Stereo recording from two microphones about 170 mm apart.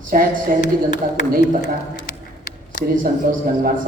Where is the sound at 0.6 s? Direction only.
45° left (ahead or behind).